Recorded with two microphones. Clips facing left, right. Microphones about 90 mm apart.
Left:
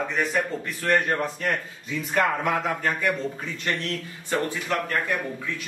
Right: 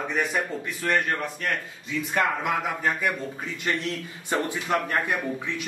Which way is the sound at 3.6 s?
20° right (ahead or behind).